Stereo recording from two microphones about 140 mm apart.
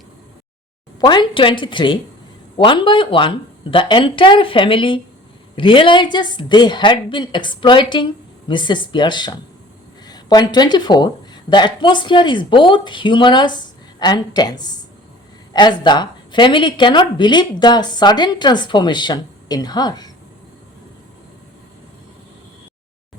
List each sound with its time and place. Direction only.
1.0 s a woman's voice: 35° left (ahead or behind)